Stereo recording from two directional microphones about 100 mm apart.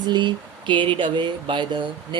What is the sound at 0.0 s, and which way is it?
Speech, 50° right (ahead or behind).